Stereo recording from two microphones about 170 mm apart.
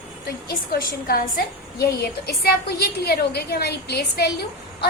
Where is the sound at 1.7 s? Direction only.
70° left (ahead or behind).